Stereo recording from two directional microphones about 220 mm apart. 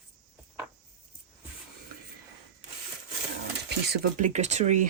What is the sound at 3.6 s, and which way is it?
Speech, 45° right (ahead or behind).